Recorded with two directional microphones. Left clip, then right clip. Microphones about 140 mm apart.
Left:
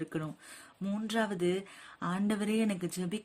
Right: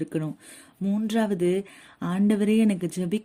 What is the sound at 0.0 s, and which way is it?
Speech, 25° right (ahead or behind).